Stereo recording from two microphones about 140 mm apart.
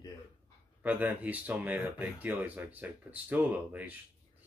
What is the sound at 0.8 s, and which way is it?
Speech, 10° right (ahead or behind).